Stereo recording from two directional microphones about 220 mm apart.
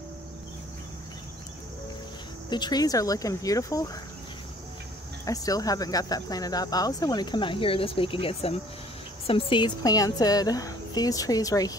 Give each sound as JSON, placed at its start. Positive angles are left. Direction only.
{"t": 2.5, "sound": "speech", "side_deg": 20}
{"t": 5.2, "sound": "speech", "side_deg": 15}